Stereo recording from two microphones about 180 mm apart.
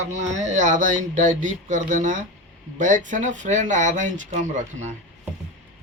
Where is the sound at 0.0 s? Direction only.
40° right (ahead or behind).